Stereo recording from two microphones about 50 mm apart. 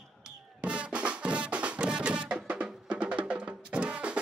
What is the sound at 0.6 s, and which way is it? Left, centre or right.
Music, right.